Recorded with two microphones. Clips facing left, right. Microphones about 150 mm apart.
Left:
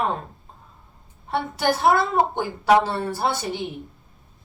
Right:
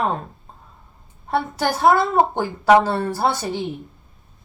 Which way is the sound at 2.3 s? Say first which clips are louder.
Right 3 dB; 45° right (ahead or behind).